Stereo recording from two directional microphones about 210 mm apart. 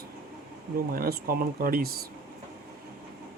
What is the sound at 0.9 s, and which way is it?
Speech, 45° right (ahead or behind).